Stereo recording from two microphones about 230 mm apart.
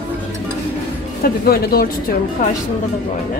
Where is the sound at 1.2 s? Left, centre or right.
Left.